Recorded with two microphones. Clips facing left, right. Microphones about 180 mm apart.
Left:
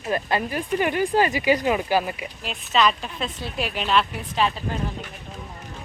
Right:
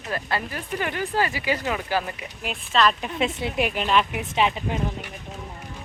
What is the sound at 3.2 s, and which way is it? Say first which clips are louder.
Speech: right 5 dB; 25° right (ahead or behind).